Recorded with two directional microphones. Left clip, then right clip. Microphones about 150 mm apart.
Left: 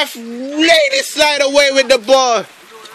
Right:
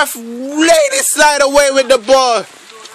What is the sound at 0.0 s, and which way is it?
Speech, 35° right (ahead or behind).